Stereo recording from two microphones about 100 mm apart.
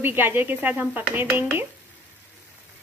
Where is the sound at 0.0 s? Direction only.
20° right (ahead or behind).